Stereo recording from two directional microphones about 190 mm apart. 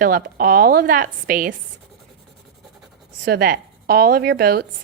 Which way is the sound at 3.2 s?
55° right (ahead or behind).